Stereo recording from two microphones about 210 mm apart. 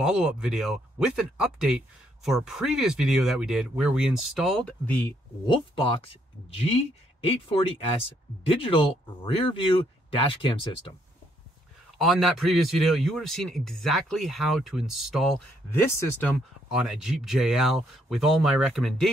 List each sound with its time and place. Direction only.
0.0 s a man's voice: 5° right (ahead or behind)
5.8 s speech: 25° left (ahead or behind)
12.0 s a man's voice: centre (ahead or behind)
15.7 s speech: 10° left (ahead or behind)
16.6 s a man's voice: 5° right (ahead or behind)